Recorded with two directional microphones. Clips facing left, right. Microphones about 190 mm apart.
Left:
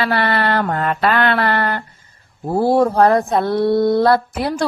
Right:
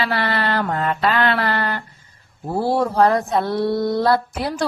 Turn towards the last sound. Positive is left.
turn(degrees=60)  # may be behind; listen again after turning